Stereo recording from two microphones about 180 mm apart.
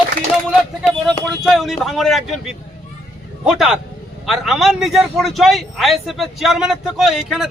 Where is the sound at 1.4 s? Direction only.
Centre (ahead or behind).